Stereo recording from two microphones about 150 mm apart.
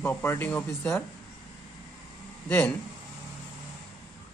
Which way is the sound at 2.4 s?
10° left (ahead or behind).